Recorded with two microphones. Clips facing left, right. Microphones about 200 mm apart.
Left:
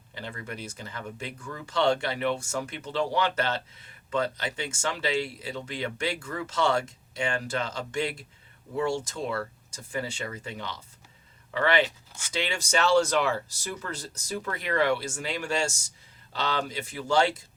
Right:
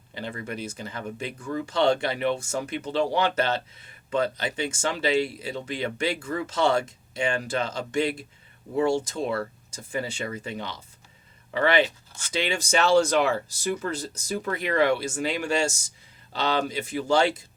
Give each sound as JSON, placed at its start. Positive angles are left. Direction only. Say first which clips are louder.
{"t": 0.1, "sound": "speech", "louder": "right 5 dB", "side_deg": -20}